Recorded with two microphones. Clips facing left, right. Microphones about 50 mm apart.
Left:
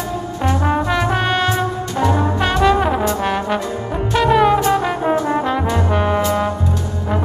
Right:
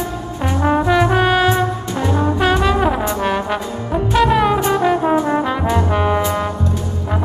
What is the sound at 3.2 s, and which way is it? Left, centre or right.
Trombone, centre.